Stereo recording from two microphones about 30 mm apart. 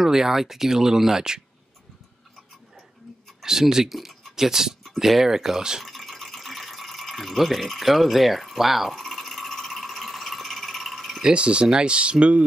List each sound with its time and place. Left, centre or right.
0.0 s speech: centre
3.4 s speech: centre
5.9 s toothbrush: centre
11.2 s speech: right